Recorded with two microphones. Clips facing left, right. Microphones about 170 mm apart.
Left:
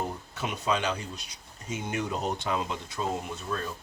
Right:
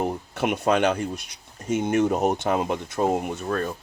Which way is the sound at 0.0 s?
65° right (ahead or behind).